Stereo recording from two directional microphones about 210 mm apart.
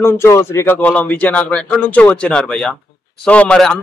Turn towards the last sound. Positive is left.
turn(degrees=5)  # may be behind; listen again after turning